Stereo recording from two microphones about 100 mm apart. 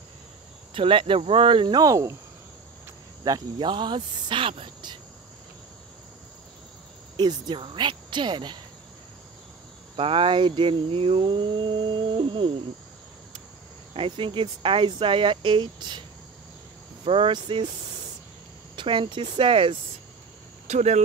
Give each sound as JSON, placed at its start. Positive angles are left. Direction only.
{"t": 0.7, "sound": "cricket", "side_deg": -60}
{"t": 3.3, "sound": "speech", "side_deg": -45}
{"t": 7.2, "sound": "speech", "side_deg": -50}
{"t": 9.9, "sound": "cricket", "side_deg": -60}
{"t": 13.9, "sound": "cricket", "side_deg": -60}
{"t": 17.0, "sound": "cricket", "side_deg": -60}
{"t": 18.8, "sound": "cricket", "side_deg": -55}
{"t": 20.7, "sound": "speech", "side_deg": -90}